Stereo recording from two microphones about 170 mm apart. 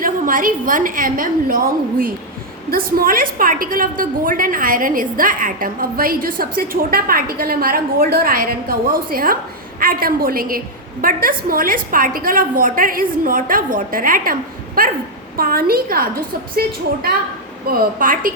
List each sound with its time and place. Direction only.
0.0 s a woman's voice: 55° right (ahead or behind)